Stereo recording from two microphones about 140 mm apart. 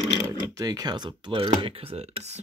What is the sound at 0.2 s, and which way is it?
Speech, 25° right (ahead or behind).